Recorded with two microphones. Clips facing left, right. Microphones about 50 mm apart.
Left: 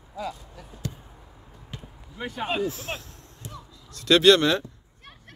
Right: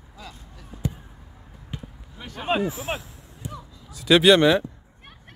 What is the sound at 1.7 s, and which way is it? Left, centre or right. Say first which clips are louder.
Basketball bounce: right 4 dB; centre.